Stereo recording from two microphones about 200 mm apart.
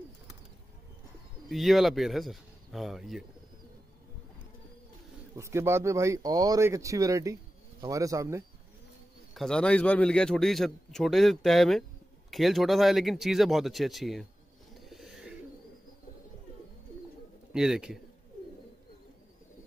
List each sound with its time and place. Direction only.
1.5 s a man's voice: centre (ahead or behind)
5.3 s speech: 15° right (ahead or behind)
9.3 s a man's voice: centre (ahead or behind)
14.7 s a sound: centre (ahead or behind)
17.5 s a man's voice: 5° right (ahead or behind)